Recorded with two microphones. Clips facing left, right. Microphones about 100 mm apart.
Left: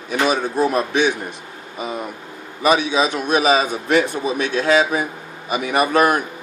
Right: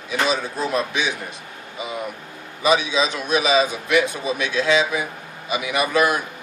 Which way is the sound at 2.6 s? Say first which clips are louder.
Left 2 dB; 50° left (ahead or behind).